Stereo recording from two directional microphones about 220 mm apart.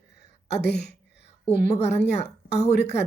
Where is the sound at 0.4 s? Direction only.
50° left (ahead or behind).